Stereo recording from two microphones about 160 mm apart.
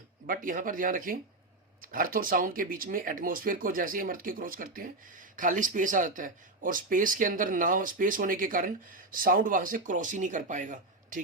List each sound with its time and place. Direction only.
0.3 s speech: 55° right (ahead or behind)